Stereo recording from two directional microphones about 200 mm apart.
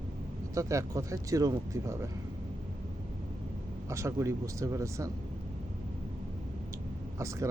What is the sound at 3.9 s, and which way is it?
Speech, 15° right (ahead or behind).